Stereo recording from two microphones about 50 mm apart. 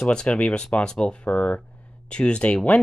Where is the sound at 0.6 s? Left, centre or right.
Centre.